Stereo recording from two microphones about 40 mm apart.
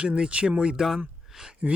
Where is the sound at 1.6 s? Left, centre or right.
Right.